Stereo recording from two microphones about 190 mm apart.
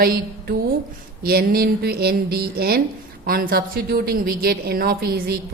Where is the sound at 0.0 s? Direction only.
50° right (ahead or behind).